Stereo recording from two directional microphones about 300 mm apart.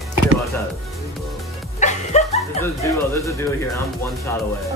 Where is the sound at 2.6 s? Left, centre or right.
Centre.